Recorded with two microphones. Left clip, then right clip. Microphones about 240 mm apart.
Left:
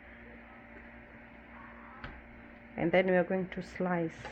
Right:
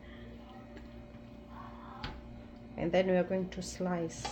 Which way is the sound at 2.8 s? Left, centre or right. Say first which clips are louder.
Left 2 dB; left.